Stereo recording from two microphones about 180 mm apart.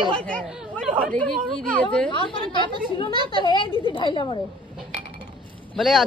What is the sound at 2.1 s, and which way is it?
A woman's voice, 30° left (ahead or behind).